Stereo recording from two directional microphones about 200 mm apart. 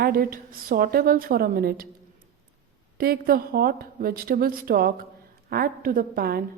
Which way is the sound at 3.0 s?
50° right (ahead or behind).